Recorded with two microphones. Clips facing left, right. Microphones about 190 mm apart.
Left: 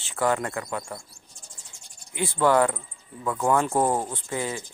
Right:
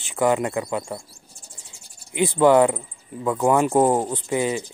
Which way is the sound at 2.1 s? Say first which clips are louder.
Right 6 dB; 20° right (ahead or behind).